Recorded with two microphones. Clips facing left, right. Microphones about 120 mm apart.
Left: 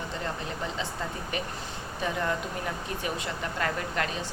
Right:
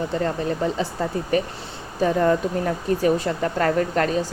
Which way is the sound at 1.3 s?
40° right (ahead or behind).